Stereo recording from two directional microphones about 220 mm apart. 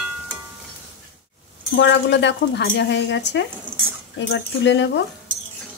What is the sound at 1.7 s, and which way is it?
Speech, 50° left (ahead or behind).